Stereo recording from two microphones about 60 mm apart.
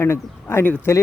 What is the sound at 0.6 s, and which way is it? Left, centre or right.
Speech, left.